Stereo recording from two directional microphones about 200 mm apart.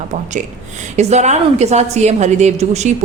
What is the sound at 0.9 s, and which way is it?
A woman's voice, 35° right (ahead or behind).